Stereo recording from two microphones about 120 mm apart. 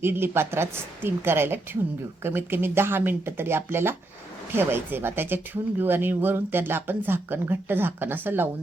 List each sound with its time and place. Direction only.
0.0 s a woman's voice: 20° right (ahead or behind)